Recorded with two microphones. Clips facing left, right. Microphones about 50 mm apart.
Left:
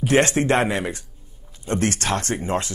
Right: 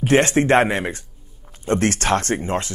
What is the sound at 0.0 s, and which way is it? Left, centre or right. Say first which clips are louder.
Speech: right 2 dB; right.